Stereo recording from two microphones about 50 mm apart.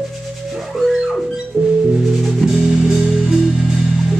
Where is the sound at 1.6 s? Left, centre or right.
Centre.